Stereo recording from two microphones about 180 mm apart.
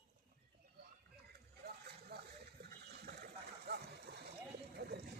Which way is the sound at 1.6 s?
60° right (ahead or behind).